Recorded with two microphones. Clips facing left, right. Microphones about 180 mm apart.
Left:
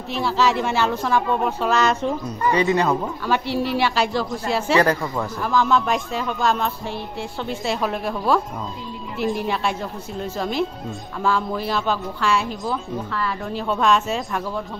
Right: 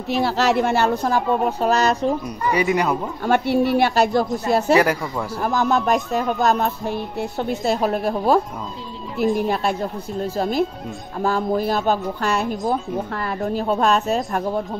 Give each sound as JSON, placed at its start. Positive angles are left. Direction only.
{"t": 0.2, "sound": "a woman's voice", "side_deg": -65}
{"t": 2.2, "sound": "speech", "side_deg": -10}
{"t": 3.3, "sound": "a woman's voice", "side_deg": -50}
{"t": 9.2, "sound": "speech", "side_deg": 0}
{"t": 9.5, "sound": "a woman's voice", "side_deg": -40}